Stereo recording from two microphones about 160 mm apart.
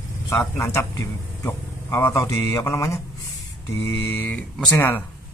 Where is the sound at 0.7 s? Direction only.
20° left (ahead or behind).